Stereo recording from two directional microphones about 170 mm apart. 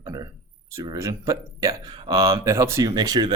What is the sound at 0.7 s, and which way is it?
Speech, 20° right (ahead or behind).